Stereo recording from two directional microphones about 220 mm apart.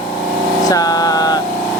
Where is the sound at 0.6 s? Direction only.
15° left (ahead or behind).